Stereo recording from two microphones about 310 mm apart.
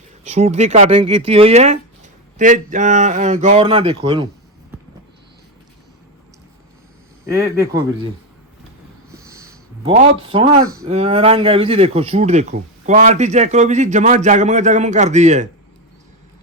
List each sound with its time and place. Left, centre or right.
0.3 s speech: right
7.3 s speech: centre
9.1 s a sound: centre
9.9 s speech: centre